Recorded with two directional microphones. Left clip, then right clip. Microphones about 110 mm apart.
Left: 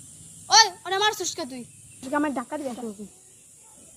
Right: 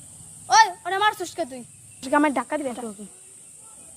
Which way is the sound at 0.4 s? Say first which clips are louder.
Right 1 dB; 15° right (ahead or behind).